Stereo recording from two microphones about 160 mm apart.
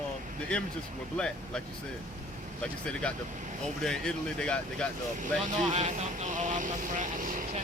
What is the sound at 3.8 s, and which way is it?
Speech, 5° left (ahead or behind).